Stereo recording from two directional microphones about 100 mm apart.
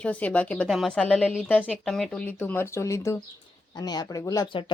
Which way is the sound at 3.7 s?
40° left (ahead or behind).